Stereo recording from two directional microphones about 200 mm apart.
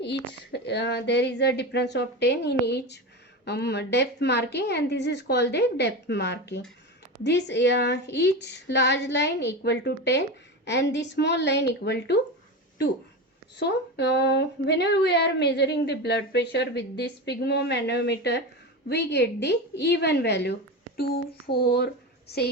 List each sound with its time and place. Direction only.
0.0 s speech: 55° left (ahead or behind)
13.6 s speech: 60° left (ahead or behind)